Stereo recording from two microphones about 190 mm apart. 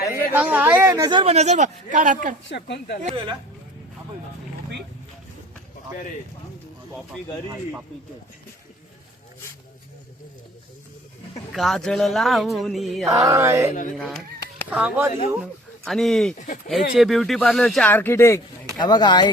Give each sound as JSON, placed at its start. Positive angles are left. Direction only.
{"t": 0.0, "sound": "a sound", "side_deg": 55}
{"t": 0.3, "sound": "a woman's voice", "side_deg": -10}
{"t": 1.2, "sound": "speech", "side_deg": -35}
{"t": 2.5, "sound": "speech", "side_deg": 65}
{"t": 3.0, "sound": "speech", "side_deg": -30}
{"t": 7.5, "sound": "a woman's voice", "side_deg": -10}
{"t": 11.5, "sound": "speech", "side_deg": 0}
{"t": 13.1, "sound": "a woman's voice", "side_deg": -15}
{"t": 13.9, "sound": "a woman's voice", "side_deg": 0}